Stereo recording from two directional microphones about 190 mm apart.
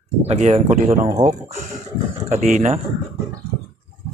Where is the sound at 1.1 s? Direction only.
20° right (ahead or behind).